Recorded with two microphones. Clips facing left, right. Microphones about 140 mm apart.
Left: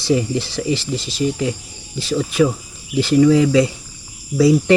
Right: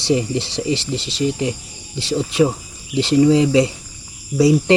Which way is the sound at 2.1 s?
25° right (ahead or behind).